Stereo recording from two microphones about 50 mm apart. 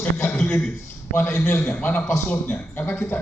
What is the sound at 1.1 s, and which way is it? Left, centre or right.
A man's voice, left.